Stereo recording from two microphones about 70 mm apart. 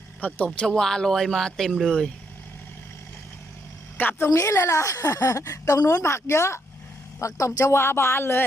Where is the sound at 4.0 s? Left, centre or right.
Left.